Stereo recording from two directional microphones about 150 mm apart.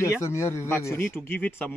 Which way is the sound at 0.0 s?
20° left (ahead or behind).